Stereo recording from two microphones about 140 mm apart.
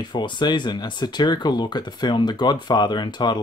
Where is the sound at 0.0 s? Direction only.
35° left (ahead or behind).